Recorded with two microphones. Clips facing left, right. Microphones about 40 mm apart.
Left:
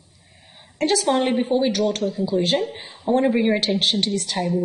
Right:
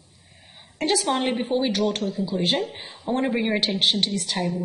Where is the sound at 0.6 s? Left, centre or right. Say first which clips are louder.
Left 3 dB; centre.